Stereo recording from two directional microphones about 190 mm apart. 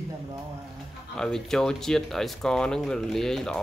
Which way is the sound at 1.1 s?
5° left (ahead or behind).